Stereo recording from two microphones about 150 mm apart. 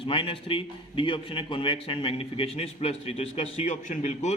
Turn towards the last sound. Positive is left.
turn(degrees=55)  # may be behind; listen again after turning